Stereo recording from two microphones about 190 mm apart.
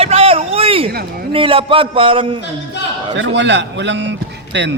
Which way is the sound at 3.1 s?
70° right (ahead or behind).